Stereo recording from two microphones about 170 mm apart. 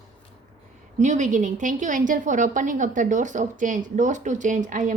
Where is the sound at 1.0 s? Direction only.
45° right (ahead or behind).